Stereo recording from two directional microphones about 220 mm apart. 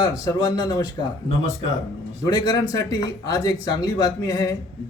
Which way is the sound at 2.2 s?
15° left (ahead or behind).